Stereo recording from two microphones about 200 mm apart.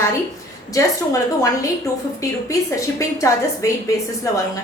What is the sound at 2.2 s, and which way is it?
A woman's voice, 15° left (ahead or behind).